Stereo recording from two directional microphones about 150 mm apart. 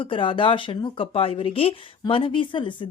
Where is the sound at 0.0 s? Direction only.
35° left (ahead or behind).